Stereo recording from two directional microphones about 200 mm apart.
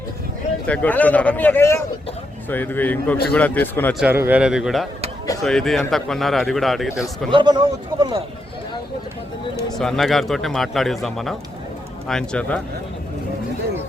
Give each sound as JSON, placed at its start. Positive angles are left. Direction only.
{"t": 0.7, "sound": "speech", "side_deg": 5}
{"t": 3.9, "sound": "speech", "side_deg": -10}
{"t": 7.3, "sound": "a man's voice", "side_deg": -25}
{"t": 9.7, "sound": "speech", "side_deg": 0}